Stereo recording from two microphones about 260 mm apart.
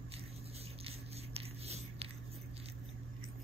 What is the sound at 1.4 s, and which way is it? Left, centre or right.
Writing, right.